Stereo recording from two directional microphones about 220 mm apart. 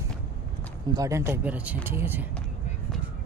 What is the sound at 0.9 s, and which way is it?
Speech, 15° right (ahead or behind).